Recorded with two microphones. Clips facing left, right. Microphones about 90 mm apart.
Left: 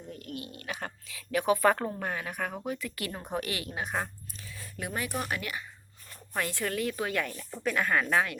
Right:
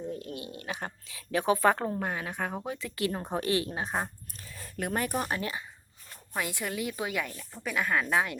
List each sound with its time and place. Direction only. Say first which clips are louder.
0.1 s speech: right 3 dB; 25° right (ahead or behind)
4.4 s speech: right 4 dB; 45° right (ahead or behind)
6.3 s a woman's voice: left 2 dB; 15° right (ahead or behind)